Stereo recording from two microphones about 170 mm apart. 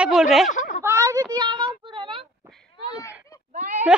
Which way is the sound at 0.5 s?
50° left (ahead or behind).